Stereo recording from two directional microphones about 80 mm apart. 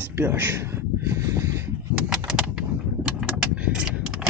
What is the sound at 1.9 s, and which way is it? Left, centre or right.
Bird, centre.